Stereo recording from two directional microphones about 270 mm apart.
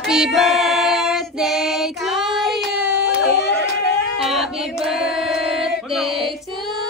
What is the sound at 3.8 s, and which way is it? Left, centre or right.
Singing, centre.